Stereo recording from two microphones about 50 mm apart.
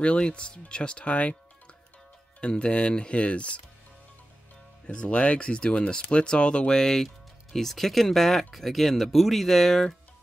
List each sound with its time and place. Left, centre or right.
0.0 s speech: left
2.4 s speech: left
4.8 s speech: left; by 9.9 s centre